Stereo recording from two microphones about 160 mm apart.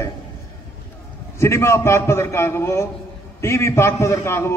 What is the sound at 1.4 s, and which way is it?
A man's voice, 15° left (ahead or behind).